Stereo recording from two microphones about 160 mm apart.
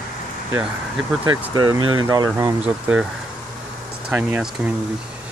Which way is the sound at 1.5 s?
25° right (ahead or behind).